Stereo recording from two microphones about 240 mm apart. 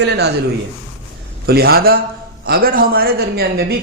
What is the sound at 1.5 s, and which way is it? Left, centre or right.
A man's voice, right.